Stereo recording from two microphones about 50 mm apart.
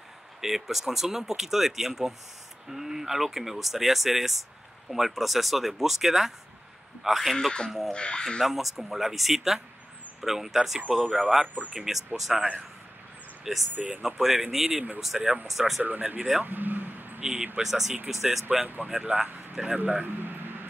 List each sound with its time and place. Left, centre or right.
0.4 s speech: centre
7.3 s speech: centre
8.4 s speech: centre
11.4 s speech: right
11.7 s speech: centre
15.8 s speech: right
16.4 s vehicle: right
17.2 s speech: centre
17.6 s speech: centre
18.9 s speech: centre
19.9 s a sound: right